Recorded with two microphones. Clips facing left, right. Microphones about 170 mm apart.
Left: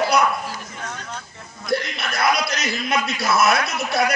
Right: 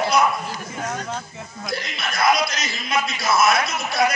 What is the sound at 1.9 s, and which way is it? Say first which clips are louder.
A man's voice: right 1 dB; 60° left (ahead or behind).